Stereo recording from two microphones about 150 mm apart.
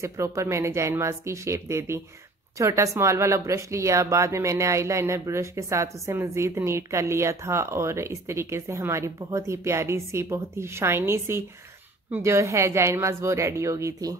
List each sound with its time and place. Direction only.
0.0 s speech: 20° right (ahead or behind)